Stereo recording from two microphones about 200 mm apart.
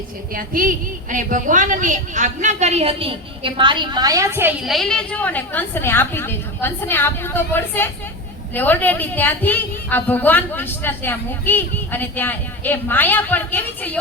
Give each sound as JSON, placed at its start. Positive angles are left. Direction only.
{"t": 0.3, "sound": "a woman's voice", "side_deg": -45}